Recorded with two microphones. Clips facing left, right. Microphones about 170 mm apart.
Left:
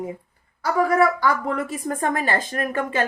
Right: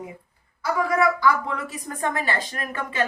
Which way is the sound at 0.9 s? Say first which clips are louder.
Even; 50° left (ahead or behind).